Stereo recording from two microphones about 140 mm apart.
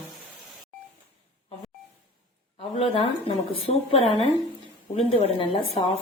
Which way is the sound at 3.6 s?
45° left (ahead or behind).